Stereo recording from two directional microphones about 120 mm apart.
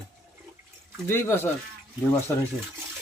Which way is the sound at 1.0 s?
20° left (ahead or behind).